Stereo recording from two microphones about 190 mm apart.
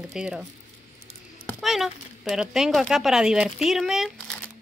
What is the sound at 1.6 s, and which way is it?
Speech, centre (ahead or behind).